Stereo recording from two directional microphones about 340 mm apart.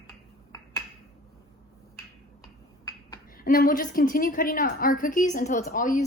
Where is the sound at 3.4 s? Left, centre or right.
Left.